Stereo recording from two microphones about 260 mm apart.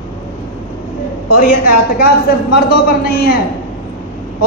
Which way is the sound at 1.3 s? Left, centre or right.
Left.